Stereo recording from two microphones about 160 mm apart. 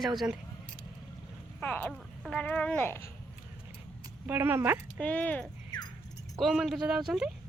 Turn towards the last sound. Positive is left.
turn(degrees=0)  # may be behind; listen again after turning